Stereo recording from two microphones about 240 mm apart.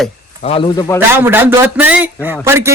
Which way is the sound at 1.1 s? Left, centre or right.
Centre.